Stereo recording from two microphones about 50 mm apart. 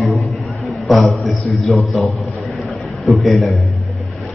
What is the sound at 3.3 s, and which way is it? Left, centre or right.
Speech, centre.